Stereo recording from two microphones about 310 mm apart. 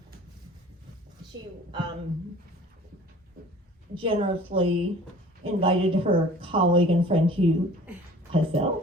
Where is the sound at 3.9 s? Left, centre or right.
Centre.